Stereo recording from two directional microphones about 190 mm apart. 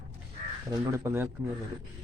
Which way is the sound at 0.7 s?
15° right (ahead or behind).